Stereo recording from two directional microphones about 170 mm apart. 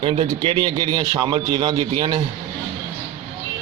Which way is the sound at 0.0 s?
30° right (ahead or behind).